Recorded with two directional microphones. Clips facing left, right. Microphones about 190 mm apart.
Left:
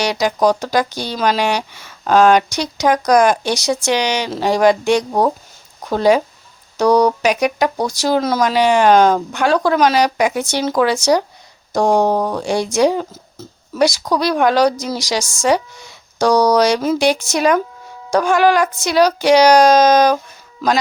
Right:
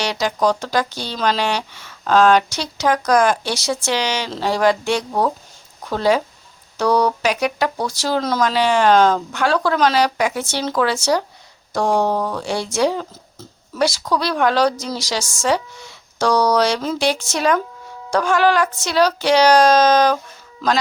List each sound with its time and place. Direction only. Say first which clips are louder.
0.0 s speech: left 4 dB; 15° left (ahead or behind)